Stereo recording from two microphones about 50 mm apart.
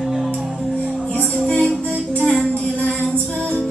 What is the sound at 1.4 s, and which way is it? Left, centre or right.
Music, centre.